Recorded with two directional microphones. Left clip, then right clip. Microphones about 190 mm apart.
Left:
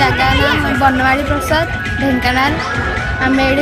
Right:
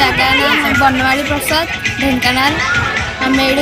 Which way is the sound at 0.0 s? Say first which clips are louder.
Right 1 dB; 5° left (ahead or behind).